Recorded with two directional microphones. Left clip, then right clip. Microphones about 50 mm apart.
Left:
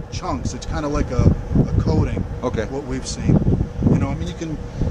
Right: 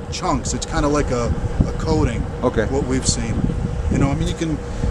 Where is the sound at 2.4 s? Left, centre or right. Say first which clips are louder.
Right 5 dB; left.